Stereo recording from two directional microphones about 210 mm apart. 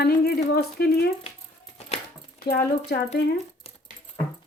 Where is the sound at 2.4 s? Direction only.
45° left (ahead or behind).